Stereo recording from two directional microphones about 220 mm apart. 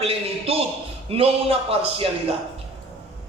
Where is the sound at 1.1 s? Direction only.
25° right (ahead or behind).